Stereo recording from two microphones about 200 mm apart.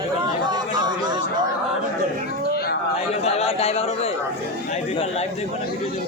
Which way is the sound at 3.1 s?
30° left (ahead or behind).